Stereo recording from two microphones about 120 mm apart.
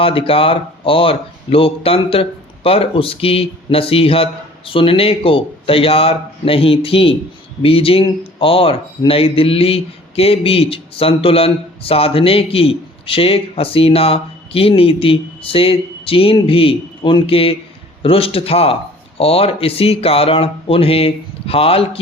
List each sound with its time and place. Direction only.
0.0 s a man's voice: 50° left (ahead or behind)